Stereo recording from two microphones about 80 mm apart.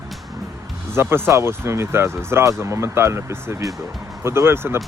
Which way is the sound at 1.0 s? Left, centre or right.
Right.